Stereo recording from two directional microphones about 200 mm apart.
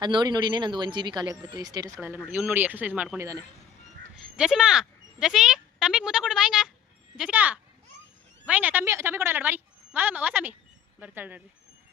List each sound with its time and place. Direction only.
0.0 s speech: 20° right (ahead or behind)